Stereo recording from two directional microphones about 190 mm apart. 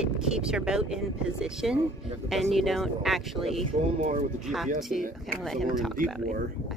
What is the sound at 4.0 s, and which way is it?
Speech, 40° right (ahead or behind).